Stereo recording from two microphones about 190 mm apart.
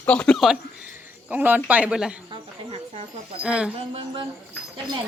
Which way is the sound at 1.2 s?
10° right (ahead or behind).